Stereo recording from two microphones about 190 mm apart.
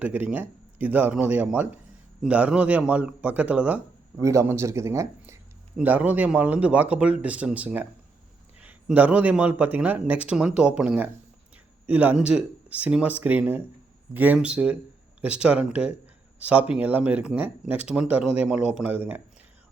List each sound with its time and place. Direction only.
0.0 s speech: 10° right (ahead or behind)